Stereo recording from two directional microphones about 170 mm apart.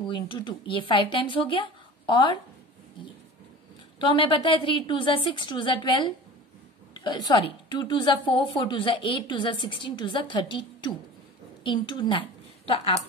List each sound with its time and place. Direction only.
0.0 s a woman's voice: 30° left (ahead or behind)
4.0 s a woman's voice: 30° left (ahead or behind)